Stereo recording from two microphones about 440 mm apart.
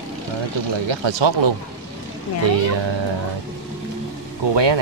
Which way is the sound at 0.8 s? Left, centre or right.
Right.